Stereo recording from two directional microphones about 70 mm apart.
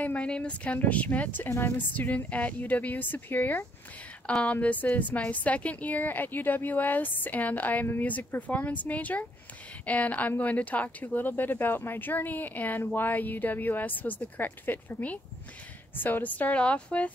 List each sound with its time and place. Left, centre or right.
0.0 s speech: centre